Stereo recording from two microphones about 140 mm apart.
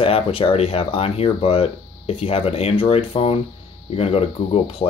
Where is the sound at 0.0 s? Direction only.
40° left (ahead or behind).